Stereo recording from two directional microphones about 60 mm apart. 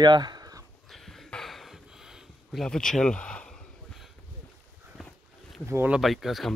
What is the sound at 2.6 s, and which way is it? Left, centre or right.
Speech, centre.